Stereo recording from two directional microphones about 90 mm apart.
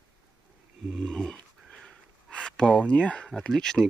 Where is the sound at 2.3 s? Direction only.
5° left (ahead or behind).